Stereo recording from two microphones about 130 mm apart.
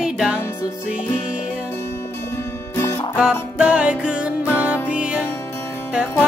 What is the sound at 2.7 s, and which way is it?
Music, 20° left (ahead or behind).